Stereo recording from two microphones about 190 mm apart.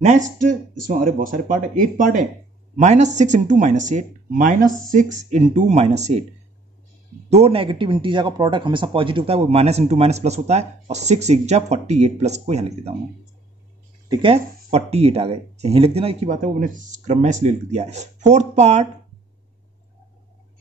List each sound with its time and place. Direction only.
0.4 s speech: 45° right (ahead or behind)
7.2 s speech: 35° right (ahead or behind)
14.1 s speech: 30° right (ahead or behind)